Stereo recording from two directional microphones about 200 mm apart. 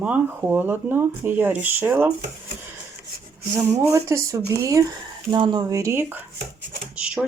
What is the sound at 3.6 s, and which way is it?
Speech, 15° right (ahead or behind).